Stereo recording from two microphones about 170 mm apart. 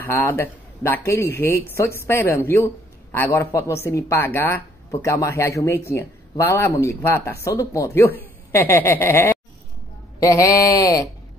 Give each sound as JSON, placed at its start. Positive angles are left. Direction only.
{"t": 0.0, "sound": "speech", "side_deg": 15}